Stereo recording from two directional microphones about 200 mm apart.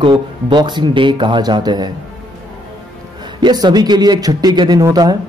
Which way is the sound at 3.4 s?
20° right (ahead or behind).